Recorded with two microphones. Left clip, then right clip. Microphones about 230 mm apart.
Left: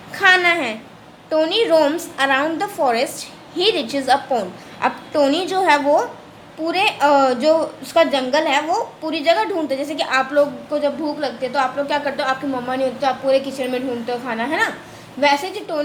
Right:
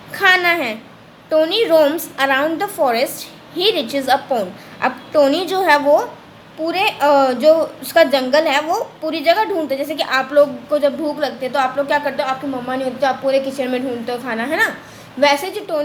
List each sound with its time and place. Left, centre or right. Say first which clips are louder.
0.1 s a woman's voice: even; centre
10.7 s a woman's voice: right 4 dB; centre